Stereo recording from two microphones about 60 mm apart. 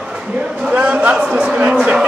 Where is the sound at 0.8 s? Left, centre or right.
Right.